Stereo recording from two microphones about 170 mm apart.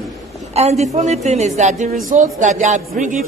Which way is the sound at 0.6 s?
40° right (ahead or behind).